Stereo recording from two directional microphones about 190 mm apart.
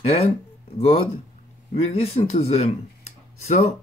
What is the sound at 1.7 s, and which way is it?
Speech, 30° left (ahead or behind).